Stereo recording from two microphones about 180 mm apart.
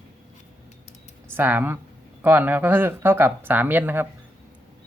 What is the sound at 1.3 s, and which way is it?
Speech, 10° right (ahead or behind).